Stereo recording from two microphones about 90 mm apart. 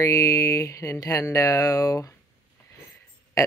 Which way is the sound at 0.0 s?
40° left (ahead or behind).